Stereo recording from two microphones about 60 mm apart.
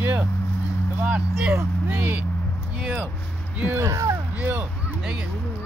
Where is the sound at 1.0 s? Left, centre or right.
Centre.